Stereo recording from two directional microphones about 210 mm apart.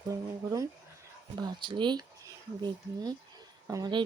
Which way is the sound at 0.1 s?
15° right (ahead or behind).